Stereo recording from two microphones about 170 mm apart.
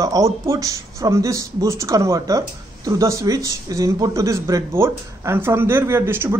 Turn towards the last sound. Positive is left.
turn(degrees=-15)  # may be behind; listen again after turning